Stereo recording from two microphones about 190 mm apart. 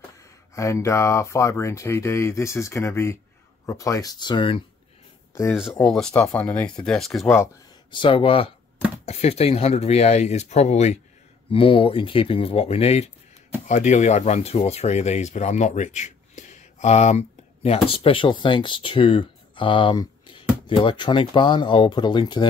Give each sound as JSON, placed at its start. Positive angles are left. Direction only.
{"t": 0.6, "sound": "speech", "side_deg": 15}
{"t": 5.5, "sound": "speech", "side_deg": 0}
{"t": 7.9, "sound": "speech", "side_deg": 25}